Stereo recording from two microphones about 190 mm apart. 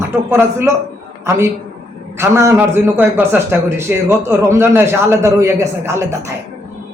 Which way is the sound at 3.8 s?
15° right (ahead or behind).